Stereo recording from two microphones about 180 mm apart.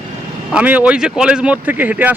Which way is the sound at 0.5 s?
10° right (ahead or behind).